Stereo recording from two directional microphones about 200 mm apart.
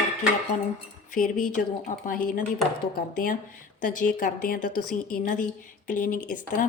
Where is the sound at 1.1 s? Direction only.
40° left (ahead or behind).